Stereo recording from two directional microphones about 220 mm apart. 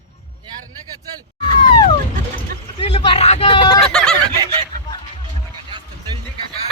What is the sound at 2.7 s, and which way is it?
Speech, 25° left (ahead or behind).